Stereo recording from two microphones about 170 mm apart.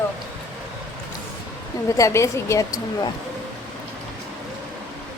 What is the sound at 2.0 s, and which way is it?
A woman's voice, 20° left (ahead or behind).